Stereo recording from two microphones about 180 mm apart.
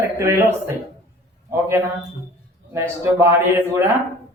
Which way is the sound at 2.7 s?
15° right (ahead or behind).